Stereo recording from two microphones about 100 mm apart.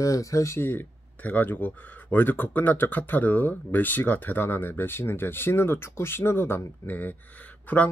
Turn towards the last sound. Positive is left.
turn(degrees=15)  # may be behind; listen again after turning